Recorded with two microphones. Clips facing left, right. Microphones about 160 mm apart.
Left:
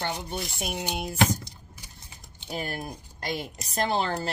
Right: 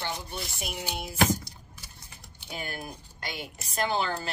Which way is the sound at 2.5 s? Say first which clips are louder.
Left 4 dB; 40° left (ahead or behind).